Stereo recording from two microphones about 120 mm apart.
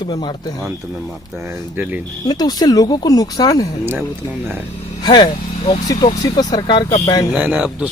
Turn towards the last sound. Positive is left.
turn(degrees=-10)  # may be behind; listen again after turning